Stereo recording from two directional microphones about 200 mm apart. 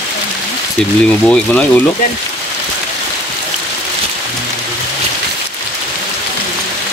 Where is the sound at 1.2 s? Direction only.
5° left (ahead or behind).